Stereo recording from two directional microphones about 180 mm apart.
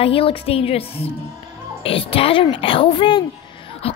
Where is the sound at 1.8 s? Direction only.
30° left (ahead or behind).